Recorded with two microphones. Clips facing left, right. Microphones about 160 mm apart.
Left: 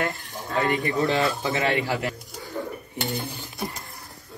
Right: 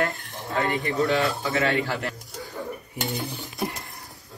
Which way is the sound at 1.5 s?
15° left (ahead or behind).